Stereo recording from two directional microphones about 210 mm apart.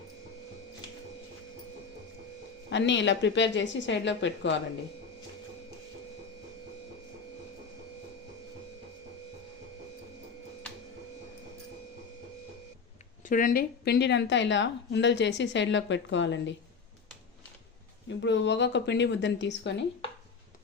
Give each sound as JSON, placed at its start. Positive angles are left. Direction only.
{"t": 2.6, "sound": "a woman's voice", "side_deg": 60}
{"t": 13.2, "sound": "a woman's voice", "side_deg": 40}
{"t": 18.2, "sound": "a woman's voice", "side_deg": 60}